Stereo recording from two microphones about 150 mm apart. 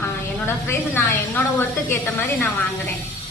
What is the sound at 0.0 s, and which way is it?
A woman's voice, 15° left (ahead or behind).